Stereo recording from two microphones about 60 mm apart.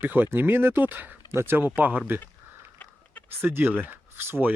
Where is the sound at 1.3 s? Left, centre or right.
Right.